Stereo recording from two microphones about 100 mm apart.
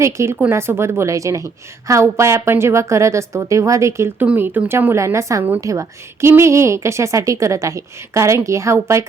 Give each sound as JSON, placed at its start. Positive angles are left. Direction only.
{"t": 0.0, "sound": "a woman's voice", "side_deg": -30}